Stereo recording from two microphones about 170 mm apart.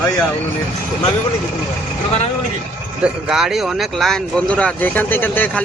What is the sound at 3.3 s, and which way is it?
Speech, 5° right (ahead or behind).